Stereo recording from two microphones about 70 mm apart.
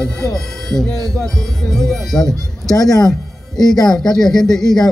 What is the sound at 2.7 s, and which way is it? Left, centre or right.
Speech, left.